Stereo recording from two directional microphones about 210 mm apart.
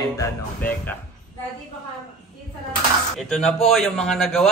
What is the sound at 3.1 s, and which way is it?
Speech, centre (ahead or behind).